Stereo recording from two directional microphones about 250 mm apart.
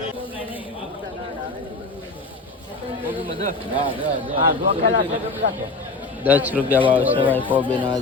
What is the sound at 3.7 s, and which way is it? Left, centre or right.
Speech, centre.